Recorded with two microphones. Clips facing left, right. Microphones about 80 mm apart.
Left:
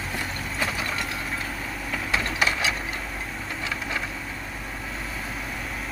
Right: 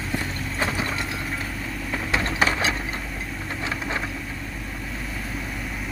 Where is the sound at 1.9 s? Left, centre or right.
Right.